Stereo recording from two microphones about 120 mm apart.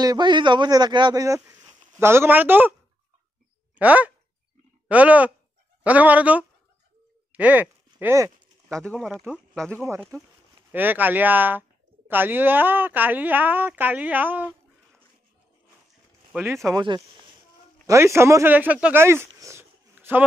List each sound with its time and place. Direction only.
0.0 s a man's voice: 35° right (ahead or behind); by 2.7 s 15° right (ahead or behind)
3.7 s speech: 10° right (ahead or behind)
7.3 s a sound: 10° right (ahead or behind)
8.7 s speech: 5° left (ahead or behind)
10.1 s speech: 30° right (ahead or behind)
10.7 s speech: 15° right (ahead or behind)
16.7 s a man's voice: 40° right (ahead or behind)
17.8 s speech: 20° right (ahead or behind)
19.0 s a sound: 20° right (ahead or behind)